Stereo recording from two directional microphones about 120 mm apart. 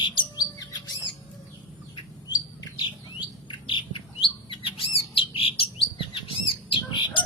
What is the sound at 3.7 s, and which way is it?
Bird, 45° left (ahead or behind).